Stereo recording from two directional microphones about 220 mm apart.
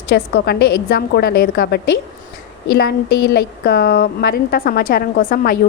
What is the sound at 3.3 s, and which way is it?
A woman's voice, 45° left (ahead or behind).